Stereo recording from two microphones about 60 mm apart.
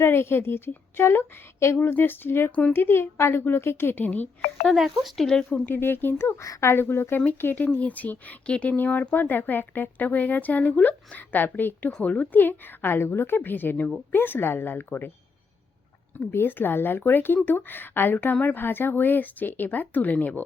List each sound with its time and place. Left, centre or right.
0.0 s a woman's voice: left
4.7 s speech: centre
5.6 s a woman's voice: left
7.4 s a woman's voice: left
16.1 s a woman's voice: left